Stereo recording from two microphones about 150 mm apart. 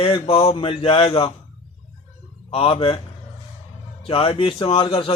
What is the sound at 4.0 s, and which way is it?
A man's voice, 40° left (ahead or behind).